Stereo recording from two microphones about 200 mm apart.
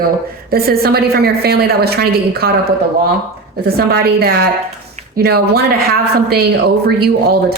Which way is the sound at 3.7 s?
50° right (ahead or behind).